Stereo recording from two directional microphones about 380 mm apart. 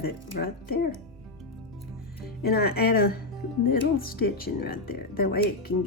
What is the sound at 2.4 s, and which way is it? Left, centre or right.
Speech, left.